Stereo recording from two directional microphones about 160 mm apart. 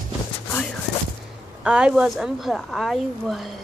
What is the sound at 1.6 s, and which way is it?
Speech, 5° right (ahead or behind).